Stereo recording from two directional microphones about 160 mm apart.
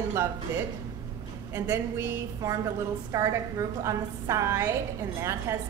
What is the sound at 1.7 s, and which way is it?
A woman's voice, 20° right (ahead or behind).